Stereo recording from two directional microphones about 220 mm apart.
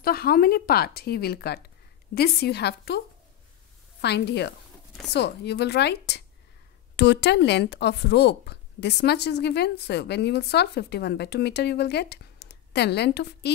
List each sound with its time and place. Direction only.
0.0 s speech: 45° left (ahead or behind)
4.0 s speech: 50° left (ahead or behind)